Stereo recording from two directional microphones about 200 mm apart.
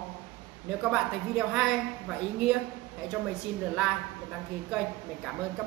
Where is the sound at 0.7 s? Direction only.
5° right (ahead or behind).